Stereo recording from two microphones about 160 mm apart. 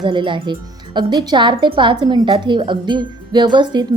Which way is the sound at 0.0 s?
30° right (ahead or behind).